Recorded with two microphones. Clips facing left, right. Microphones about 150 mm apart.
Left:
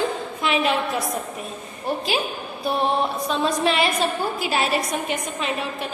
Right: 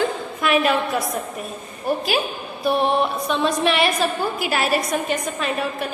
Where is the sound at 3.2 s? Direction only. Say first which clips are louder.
Right 1 dB; 30° left (ahead or behind).